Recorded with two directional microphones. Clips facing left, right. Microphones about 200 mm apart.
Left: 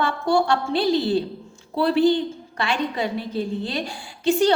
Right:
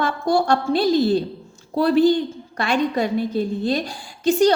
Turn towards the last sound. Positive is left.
turn(degrees=-40)  # may be behind; listen again after turning